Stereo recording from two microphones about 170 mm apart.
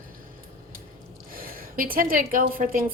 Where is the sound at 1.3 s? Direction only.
55° right (ahead or behind).